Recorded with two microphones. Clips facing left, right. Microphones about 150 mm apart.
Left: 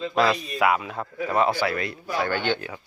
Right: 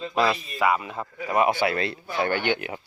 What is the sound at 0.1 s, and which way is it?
Speech, 5° right (ahead or behind).